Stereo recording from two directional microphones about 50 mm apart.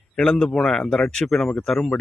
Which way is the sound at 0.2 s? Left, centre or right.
Centre.